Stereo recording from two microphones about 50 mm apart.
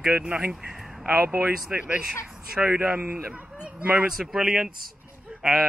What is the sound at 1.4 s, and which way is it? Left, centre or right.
Speech, right.